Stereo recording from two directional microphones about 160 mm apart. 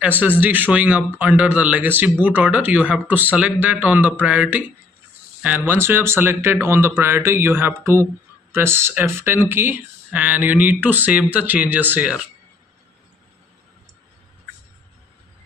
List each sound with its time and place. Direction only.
0.4 s speech: 10° right (ahead or behind)